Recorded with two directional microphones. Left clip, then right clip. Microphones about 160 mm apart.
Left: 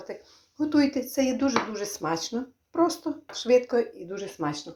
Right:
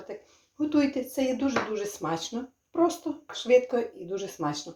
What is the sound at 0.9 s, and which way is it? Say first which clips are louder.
Speech: left 2 dB; 40° left (ahead or behind).